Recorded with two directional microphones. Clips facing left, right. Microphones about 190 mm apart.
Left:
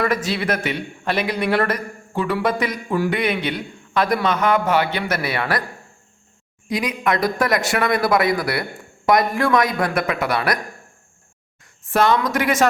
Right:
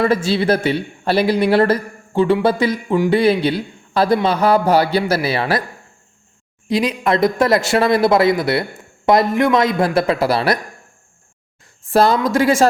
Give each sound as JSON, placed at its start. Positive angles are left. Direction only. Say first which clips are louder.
{"t": 0.0, "sound": "a man's voice", "louder": "right 5 dB", "side_deg": -30}
{"t": 6.7, "sound": "speech", "louder": "right 4 dB", "side_deg": -30}
{"t": 11.6, "sound": "speech", "louder": "right 4 dB", "side_deg": -30}